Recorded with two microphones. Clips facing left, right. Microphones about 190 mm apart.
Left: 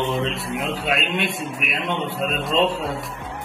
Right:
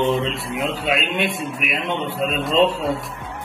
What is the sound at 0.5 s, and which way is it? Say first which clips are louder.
A man's voice: right 4 dB; centre (ahead or behind).